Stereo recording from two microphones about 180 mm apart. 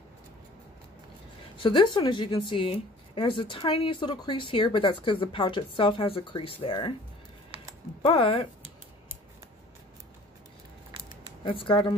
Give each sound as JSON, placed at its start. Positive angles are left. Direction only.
{"t": 1.6, "sound": "speech", "side_deg": 25}
{"t": 8.0, "sound": "speech", "side_deg": 30}
{"t": 11.4, "sound": "speech", "side_deg": 30}